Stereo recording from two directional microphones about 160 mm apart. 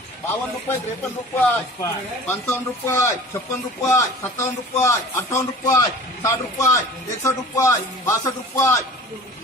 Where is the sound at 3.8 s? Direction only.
15° left (ahead or behind).